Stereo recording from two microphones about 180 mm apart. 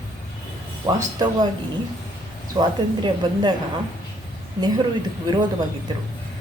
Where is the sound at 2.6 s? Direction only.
25° right (ahead or behind).